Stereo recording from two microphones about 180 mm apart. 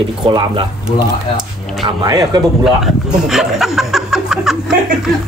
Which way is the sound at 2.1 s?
20° right (ahead or behind).